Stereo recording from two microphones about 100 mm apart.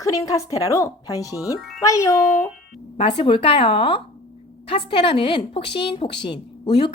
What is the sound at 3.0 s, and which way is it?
A woman's voice, 75° left (ahead or behind).